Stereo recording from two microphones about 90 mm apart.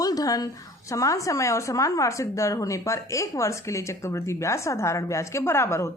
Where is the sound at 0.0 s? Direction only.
45° left (ahead or behind).